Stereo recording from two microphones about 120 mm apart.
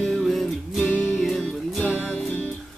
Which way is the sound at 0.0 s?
Centre (ahead or behind).